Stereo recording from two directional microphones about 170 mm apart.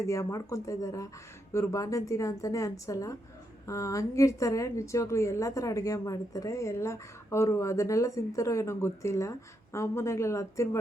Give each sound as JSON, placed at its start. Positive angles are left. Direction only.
{"t": 0.1, "sound": "a woman's voice", "side_deg": 20}